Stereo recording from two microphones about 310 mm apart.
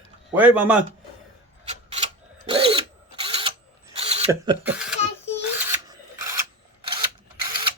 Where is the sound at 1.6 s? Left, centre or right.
Right.